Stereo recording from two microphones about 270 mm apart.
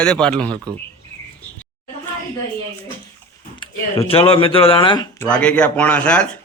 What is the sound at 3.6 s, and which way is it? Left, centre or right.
Speech, left.